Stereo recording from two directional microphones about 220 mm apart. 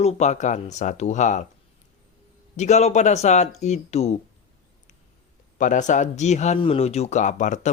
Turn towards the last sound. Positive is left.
turn(degrees=35)  # may be behind; listen again after turning